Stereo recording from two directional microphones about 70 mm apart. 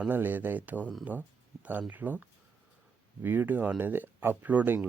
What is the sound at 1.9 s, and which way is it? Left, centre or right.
Speech, right.